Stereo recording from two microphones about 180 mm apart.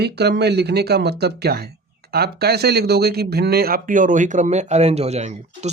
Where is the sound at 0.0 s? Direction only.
65° right (ahead or behind).